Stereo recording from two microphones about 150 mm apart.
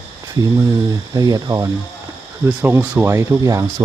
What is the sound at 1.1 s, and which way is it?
Speech, 25° right (ahead or behind).